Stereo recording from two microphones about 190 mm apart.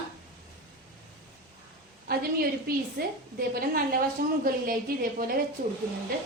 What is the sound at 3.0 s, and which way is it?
Speech, 55° right (ahead or behind).